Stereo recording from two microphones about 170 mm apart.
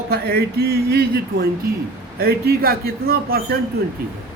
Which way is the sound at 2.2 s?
65° right (ahead or behind).